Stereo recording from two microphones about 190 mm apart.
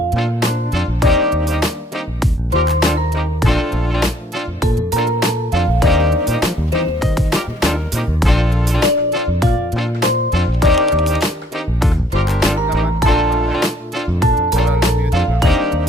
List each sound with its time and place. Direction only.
0.1 s music: centre (ahead or behind)